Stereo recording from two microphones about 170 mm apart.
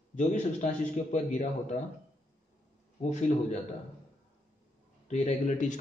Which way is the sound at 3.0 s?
45° left (ahead or behind).